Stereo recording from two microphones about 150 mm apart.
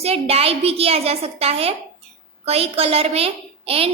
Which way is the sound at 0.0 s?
40° right (ahead or behind).